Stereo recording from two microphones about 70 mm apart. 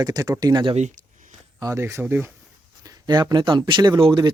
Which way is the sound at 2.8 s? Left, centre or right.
Right.